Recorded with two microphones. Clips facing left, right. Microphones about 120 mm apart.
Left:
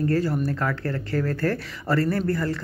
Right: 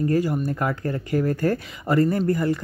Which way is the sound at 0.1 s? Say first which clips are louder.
Right 1 dB; 15° right (ahead or behind).